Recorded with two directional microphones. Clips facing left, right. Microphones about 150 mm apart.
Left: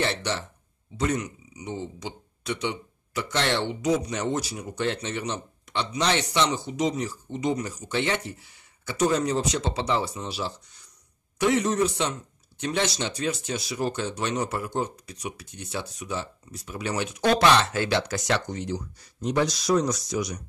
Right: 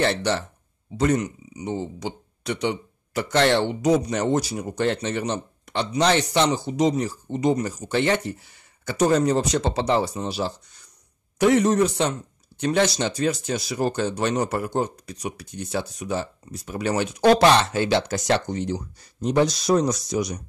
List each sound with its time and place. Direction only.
0.0 s speech: 40° right (ahead or behind); by 20.3 s 25° right (ahead or behind)